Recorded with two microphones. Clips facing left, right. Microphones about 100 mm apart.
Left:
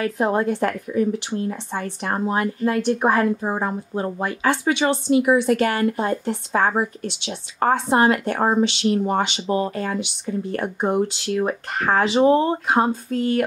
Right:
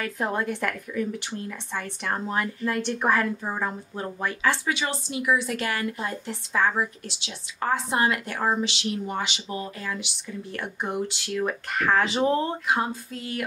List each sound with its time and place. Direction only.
0.0 s speech: 30° left (ahead or behind)
5.4 s speech: 50° left (ahead or behind)
7.9 s speech: 30° left (ahead or behind)
8.3 s speech: 45° left (ahead or behind)
10.5 s speech: 40° left (ahead or behind)